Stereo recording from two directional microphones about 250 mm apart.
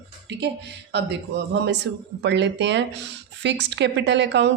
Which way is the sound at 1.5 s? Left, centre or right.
Right.